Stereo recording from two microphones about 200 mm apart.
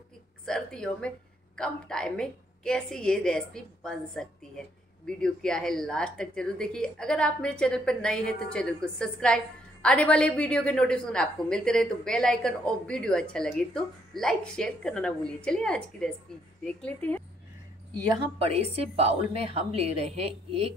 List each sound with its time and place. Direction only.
0.5 s a woman's voice: 5° left (ahead or behind)
18.1 s a woman's voice: 30° right (ahead or behind)